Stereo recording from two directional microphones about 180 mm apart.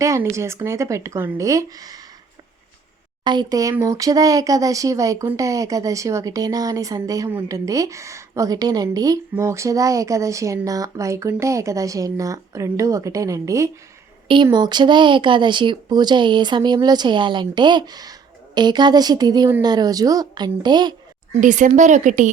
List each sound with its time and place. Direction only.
0.0 s speech: 15° right (ahead or behind)
3.2 s speech: 20° right (ahead or behind)
21.4 s speech: 45° right (ahead or behind)